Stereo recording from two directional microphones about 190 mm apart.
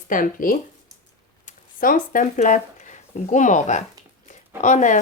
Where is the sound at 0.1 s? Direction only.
45° left (ahead or behind).